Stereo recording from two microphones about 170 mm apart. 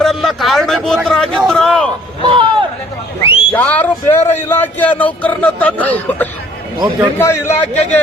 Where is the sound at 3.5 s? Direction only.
10° left (ahead or behind).